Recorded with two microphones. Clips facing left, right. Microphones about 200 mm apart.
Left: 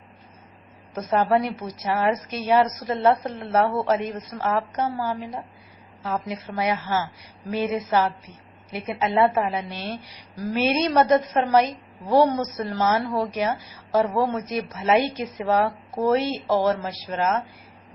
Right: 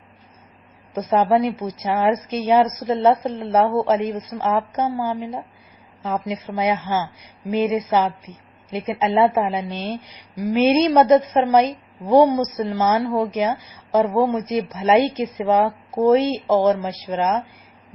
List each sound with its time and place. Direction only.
1.3 s a woman's voice: 20° right (ahead or behind)